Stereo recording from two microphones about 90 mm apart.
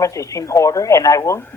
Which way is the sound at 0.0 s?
35° left (ahead or behind).